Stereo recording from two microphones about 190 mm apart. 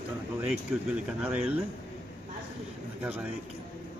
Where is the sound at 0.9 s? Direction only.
5° right (ahead or behind).